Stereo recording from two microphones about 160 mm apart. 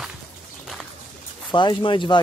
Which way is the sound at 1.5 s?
30° left (ahead or behind).